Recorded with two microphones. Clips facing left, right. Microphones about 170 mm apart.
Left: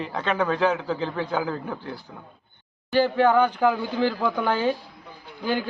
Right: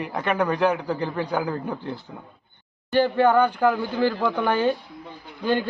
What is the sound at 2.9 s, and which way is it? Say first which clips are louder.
Speech: right 1 dB; 10° left (ahead or behind).